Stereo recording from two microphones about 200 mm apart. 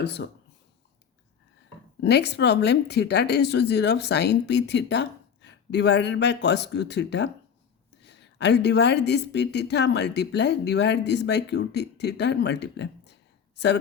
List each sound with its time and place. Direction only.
0.2 s speech: 60° left (ahead or behind)
2.0 s speech: 60° left (ahead or behind)